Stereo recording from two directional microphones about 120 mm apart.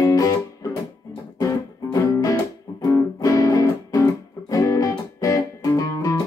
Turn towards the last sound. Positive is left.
turn(degrees=30)  # may be behind; listen again after turning